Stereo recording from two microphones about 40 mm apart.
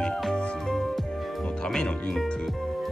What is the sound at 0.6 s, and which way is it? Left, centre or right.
Music, centre.